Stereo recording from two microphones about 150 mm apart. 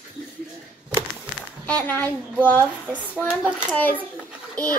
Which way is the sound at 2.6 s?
10° right (ahead or behind).